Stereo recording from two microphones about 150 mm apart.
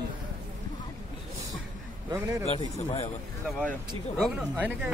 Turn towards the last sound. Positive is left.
turn(degrees=-10)  # may be behind; listen again after turning